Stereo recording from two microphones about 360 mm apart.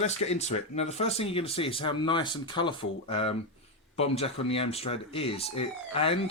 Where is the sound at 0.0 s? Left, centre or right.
Centre.